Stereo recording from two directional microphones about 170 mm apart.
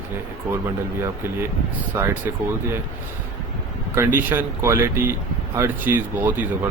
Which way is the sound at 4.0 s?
15° right (ahead or behind).